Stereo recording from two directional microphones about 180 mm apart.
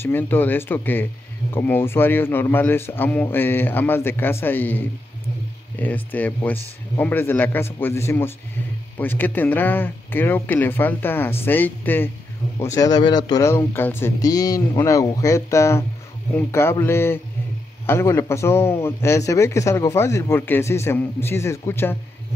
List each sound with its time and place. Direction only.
0.0 s a man's voice: 10° left (ahead or behind)